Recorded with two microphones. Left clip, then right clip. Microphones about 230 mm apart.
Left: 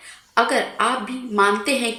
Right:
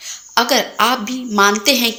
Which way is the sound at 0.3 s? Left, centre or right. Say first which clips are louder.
Right 4 dB; right.